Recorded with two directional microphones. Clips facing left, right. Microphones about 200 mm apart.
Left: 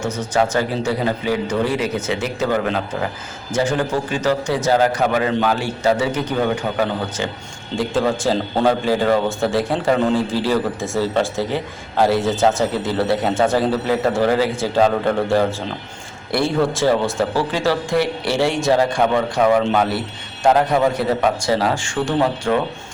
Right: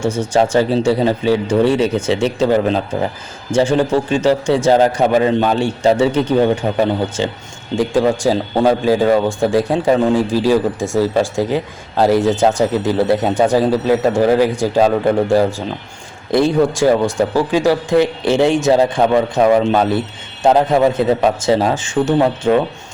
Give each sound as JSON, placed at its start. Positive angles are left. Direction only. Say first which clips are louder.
{"t": 0.0, "sound": "speech", "louder": "right 6 dB", "side_deg": -10}
{"t": 0.5, "sound": "a man's voice", "louder": "right 6 dB", "side_deg": -25}
{"t": 7.8, "sound": "a man's voice", "louder": "right 5 dB", "side_deg": -15}